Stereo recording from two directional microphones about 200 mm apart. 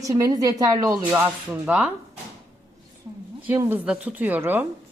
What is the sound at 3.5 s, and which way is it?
A woman's voice, 10° right (ahead or behind).